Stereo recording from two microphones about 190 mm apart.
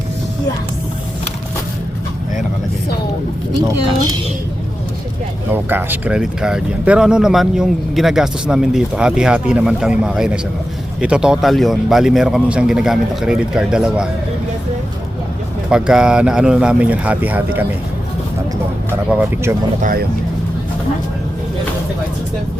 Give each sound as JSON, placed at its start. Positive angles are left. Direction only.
{"t": 5.5, "sound": "speech", "side_deg": -10}
{"t": 15.7, "sound": "speech", "side_deg": -5}
{"t": 19.0, "sound": "speech", "side_deg": -10}
{"t": 19.8, "sound": "speech", "side_deg": -50}